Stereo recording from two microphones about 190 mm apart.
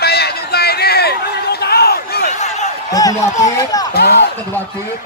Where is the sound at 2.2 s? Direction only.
35° left (ahead or behind).